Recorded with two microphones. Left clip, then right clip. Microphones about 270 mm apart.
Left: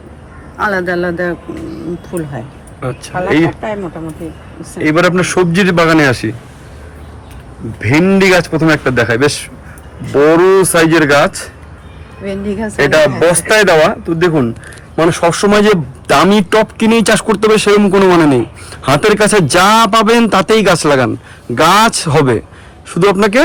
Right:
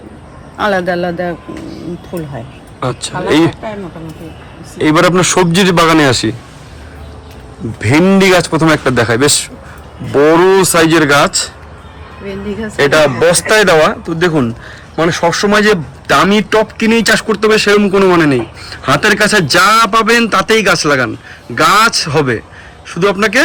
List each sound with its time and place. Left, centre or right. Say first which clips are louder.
0.5 s a man's voice: right 1 dB; right
4.8 s a man's voice: right 2 dB; centre
7.9 s a man's voice: right 1 dB; centre
12.7 s a man's voice: even; centre